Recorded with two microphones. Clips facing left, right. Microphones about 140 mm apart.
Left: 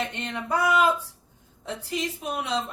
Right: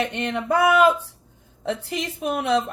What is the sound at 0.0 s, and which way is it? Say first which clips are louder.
Speech: right 6 dB; 65° right (ahead or behind).